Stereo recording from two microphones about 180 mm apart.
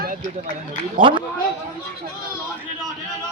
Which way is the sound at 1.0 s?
30° right (ahead or behind).